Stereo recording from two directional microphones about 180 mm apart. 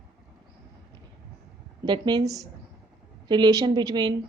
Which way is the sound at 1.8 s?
25° right (ahead or behind).